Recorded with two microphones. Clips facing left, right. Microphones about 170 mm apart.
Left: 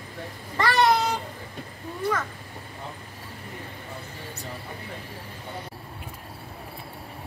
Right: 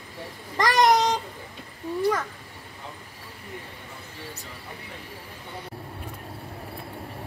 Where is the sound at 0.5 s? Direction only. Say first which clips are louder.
Right 1 dB; 15° right (ahead or behind).